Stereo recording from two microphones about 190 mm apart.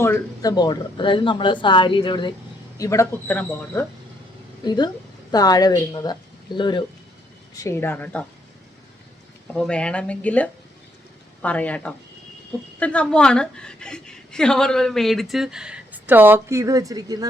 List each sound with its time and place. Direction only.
0.0 s speech: 15° left (ahead or behind)
4.6 s speech: 20° left (ahead or behind)
9.6 s a woman's voice: 5° left (ahead or behind); by 17.2 s 20° right (ahead or behind)